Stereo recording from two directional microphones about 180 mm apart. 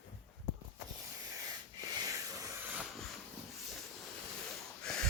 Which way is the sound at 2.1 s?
20° right (ahead or behind).